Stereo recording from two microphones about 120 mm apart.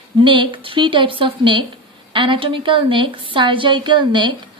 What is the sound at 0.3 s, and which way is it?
A woman's voice, 45° right (ahead or behind).